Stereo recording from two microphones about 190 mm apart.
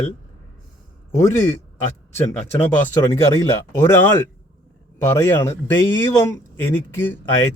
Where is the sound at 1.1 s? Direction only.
15° left (ahead or behind).